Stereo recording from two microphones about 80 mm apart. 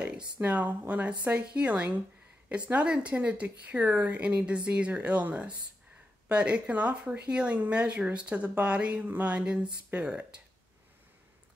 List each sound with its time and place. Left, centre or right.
0.0 s speech: centre